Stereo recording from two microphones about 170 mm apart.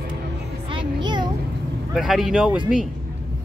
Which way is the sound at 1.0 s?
25° right (ahead or behind).